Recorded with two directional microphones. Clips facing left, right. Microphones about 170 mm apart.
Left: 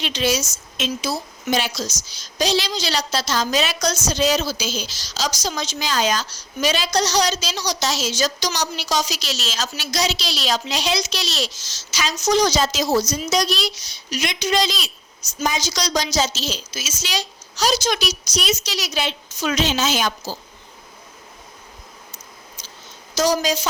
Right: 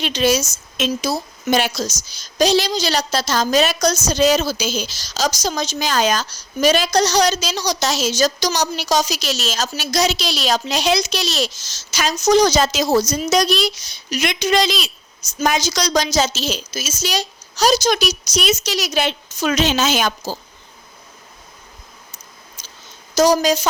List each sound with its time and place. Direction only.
0.0 s a woman's voice: 45° right (ahead or behind)
22.6 s a sound: 45° right (ahead or behind)
23.1 s a woman's voice: 45° right (ahead or behind)